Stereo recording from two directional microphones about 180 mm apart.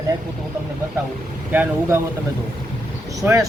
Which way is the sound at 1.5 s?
10° right (ahead or behind).